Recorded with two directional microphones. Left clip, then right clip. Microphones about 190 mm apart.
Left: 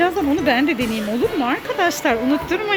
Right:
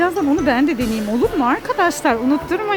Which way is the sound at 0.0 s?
10° right (ahead or behind).